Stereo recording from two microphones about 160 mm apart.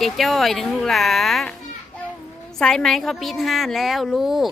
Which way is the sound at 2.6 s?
5° left (ahead or behind).